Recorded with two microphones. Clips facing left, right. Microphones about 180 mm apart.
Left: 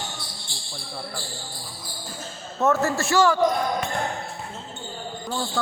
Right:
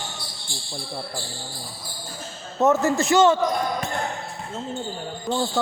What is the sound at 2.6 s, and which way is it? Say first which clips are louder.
Speech: right 3 dB; 20° right (ahead or behind).